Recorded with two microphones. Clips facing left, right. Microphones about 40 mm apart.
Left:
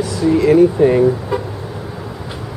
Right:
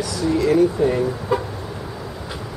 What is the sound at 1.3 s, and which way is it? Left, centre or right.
Vehicle, centre.